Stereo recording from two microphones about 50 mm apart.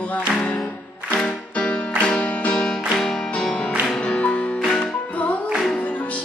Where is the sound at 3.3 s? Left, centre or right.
Left.